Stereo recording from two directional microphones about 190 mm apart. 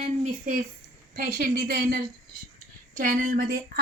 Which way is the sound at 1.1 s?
50° right (ahead or behind).